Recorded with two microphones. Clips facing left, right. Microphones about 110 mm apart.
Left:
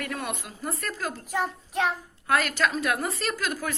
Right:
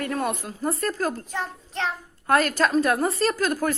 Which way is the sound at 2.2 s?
45° right (ahead or behind).